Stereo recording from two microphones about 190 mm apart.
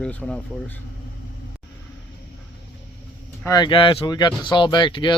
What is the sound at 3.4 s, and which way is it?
Speech, 20° left (ahead or behind).